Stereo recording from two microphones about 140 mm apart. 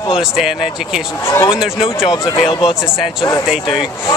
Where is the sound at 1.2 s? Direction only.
20° left (ahead or behind).